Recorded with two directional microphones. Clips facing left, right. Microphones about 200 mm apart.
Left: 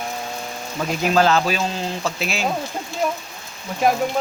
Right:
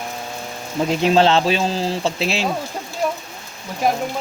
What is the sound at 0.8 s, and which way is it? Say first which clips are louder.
Speech: right 3 dB; 25° right (ahead or behind).